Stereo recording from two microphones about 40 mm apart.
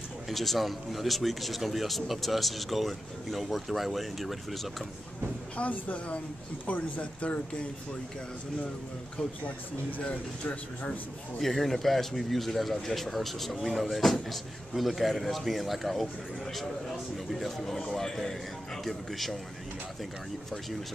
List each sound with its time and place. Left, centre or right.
0.3 s speech: centre
5.6 s speech: left
10.0 s speech: left
11.3 s speech: centre
17.6 s speech: centre